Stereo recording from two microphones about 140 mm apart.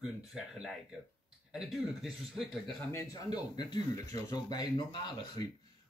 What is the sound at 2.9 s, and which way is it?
Speech, 25° left (ahead or behind).